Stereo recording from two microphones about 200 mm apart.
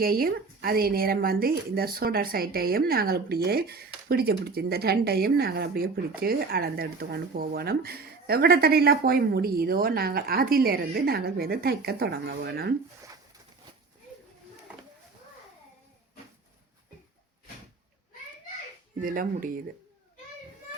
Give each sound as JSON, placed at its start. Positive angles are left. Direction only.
{"t": 0.0, "sound": "a woman's voice", "side_deg": -50}
{"t": 19.0, "sound": "a woman's voice", "side_deg": -45}